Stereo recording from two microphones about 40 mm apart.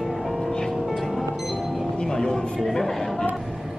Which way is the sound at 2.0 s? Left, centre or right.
Centre.